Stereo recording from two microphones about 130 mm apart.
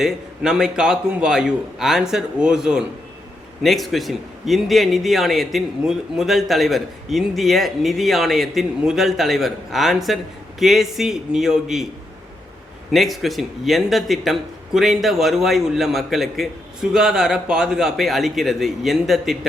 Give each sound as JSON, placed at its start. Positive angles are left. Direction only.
{"t": 0.0, "sound": "a man's voice", "side_deg": -5}
{"t": 12.9, "sound": "a man's voice", "side_deg": 0}